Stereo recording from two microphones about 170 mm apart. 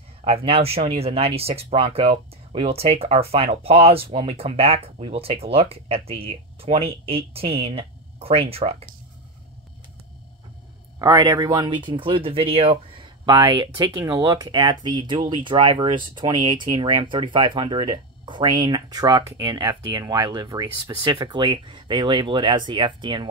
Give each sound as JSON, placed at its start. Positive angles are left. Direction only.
{"t": 0.2, "sound": "speech", "side_deg": -35}
{"t": 11.0, "sound": "speech", "side_deg": -20}